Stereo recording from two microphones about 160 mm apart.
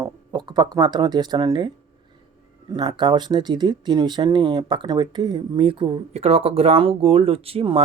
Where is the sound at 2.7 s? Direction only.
25° right (ahead or behind).